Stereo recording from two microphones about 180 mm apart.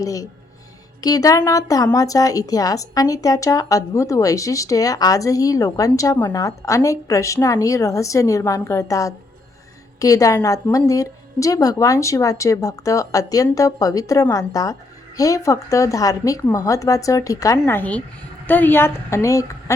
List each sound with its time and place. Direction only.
0.0 s a woman's voice: 20° left (ahead or behind)